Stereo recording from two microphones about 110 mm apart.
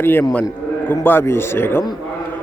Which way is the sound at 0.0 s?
20° left (ahead or behind).